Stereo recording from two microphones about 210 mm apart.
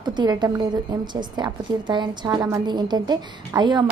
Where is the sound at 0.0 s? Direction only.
20° right (ahead or behind).